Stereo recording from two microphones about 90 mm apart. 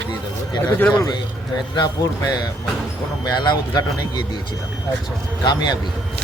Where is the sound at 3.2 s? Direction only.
50° left (ahead or behind).